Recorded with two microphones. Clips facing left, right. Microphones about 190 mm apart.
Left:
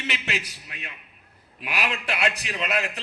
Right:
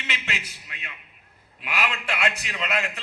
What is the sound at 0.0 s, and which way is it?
A man's voice, 35° left (ahead or behind).